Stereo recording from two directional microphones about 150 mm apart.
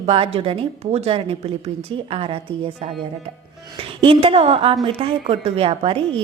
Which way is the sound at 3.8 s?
40° right (ahead or behind).